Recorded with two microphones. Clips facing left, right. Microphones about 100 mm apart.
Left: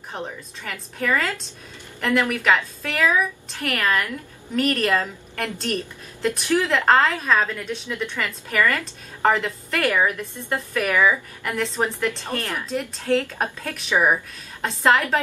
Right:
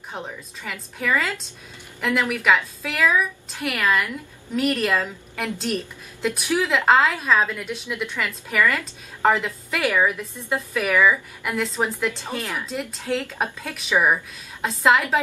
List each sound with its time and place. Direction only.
0.1 s a woman's voice: 5° right (ahead or behind)
13.9 s speech: 10° left (ahead or behind)
14.6 s a woman's voice: centre (ahead or behind)